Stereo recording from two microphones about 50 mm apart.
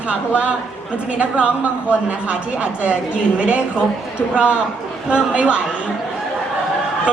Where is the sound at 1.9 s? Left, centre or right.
Right.